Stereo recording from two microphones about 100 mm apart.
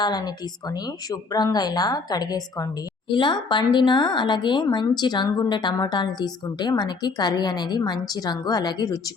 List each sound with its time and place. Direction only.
0.0 s speech: 45° left (ahead or behind)
3.1 s speech: 50° left (ahead or behind)